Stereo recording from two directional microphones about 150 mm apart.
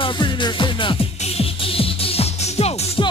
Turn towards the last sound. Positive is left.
turn(degrees=45)  # may be behind; listen again after turning